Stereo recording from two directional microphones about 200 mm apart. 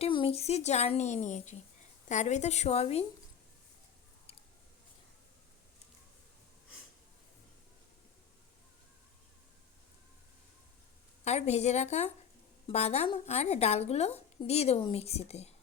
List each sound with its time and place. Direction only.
0.0 s a woman's voice: 25° left (ahead or behind)
11.3 s a woman's voice: 35° left (ahead or behind)